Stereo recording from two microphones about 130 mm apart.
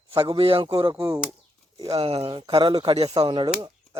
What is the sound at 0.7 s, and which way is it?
Speech, 25° right (ahead or behind).